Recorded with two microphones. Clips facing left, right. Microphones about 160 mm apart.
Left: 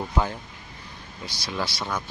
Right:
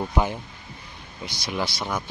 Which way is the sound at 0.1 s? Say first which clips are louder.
Right 1 dB; 15° right (ahead or behind).